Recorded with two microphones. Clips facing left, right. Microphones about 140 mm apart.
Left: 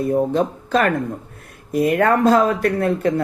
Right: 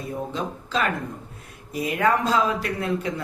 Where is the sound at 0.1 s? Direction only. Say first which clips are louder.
Left 9 dB; 55° left (ahead or behind).